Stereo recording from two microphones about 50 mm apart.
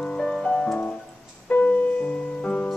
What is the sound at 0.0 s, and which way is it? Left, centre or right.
Music, left.